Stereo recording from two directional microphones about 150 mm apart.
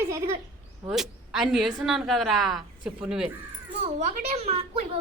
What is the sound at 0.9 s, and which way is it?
Speech, centre (ahead or behind).